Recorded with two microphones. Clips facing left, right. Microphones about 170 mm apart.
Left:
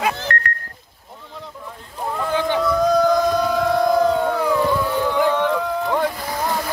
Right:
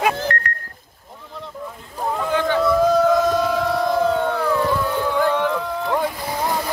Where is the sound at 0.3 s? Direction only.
60° left (ahead or behind).